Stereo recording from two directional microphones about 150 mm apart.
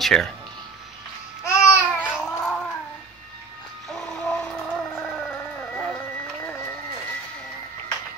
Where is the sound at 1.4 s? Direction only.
20° left (ahead or behind).